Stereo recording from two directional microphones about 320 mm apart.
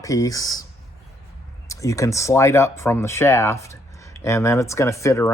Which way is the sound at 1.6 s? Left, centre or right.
Centre.